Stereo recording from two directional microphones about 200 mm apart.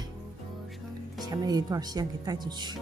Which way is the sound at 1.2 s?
20° right (ahead or behind).